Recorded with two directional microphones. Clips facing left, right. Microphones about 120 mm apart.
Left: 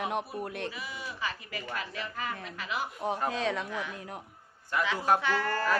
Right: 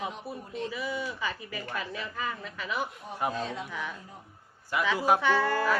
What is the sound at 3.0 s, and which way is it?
Speech, 90° left.